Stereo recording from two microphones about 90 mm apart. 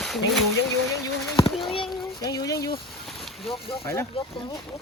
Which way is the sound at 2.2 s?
45° left (ahead or behind).